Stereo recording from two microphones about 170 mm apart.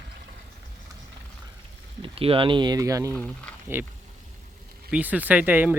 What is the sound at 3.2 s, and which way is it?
Speech, 10° left (ahead or behind).